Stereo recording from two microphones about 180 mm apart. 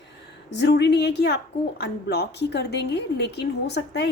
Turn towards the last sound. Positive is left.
turn(degrees=70)  # may be behind; listen again after turning